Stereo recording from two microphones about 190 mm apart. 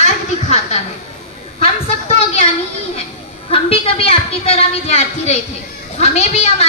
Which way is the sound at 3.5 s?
30° left (ahead or behind).